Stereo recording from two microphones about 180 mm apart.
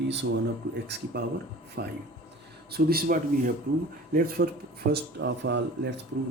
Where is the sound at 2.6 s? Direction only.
60° right (ahead or behind).